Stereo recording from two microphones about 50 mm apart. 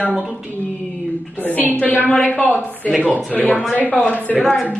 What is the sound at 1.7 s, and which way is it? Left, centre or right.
Speech, left.